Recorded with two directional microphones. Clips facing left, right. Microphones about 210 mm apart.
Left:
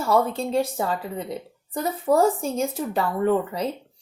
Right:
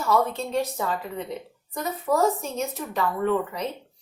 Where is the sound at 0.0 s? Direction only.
30° left (ahead or behind).